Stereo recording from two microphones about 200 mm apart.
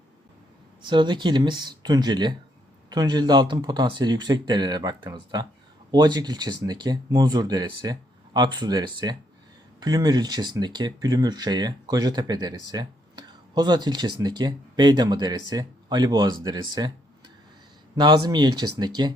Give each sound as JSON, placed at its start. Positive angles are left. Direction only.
{"t": 0.8, "sound": "speech", "side_deg": -25}
{"t": 16.6, "sound": "a sound", "side_deg": -20}
{"t": 17.9, "sound": "speech", "side_deg": -20}